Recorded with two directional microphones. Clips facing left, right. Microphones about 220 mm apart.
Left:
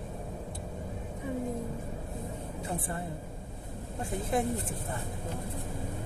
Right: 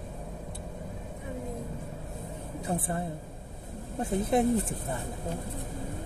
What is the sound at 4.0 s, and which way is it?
Speech, 20° right (ahead or behind).